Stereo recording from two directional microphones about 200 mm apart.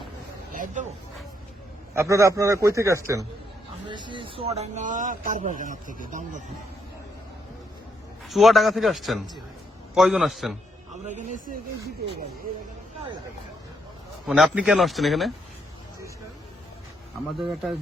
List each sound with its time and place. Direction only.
0.5 s a sound: 40° right (ahead or behind)
2.0 s a man's voice: 15° right (ahead or behind); by 6.4 s 40° right (ahead or behind)
8.3 s a man's voice: centre (ahead or behind)
11.0 s speech: 40° right (ahead or behind)
14.3 s a man's voice: 5° right (ahead or behind)
17.4 s a man's voice: centre (ahead or behind)